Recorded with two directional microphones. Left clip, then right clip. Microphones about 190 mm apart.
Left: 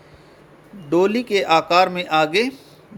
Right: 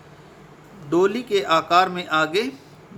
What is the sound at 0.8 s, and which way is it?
A man's voice, 20° left (ahead or behind).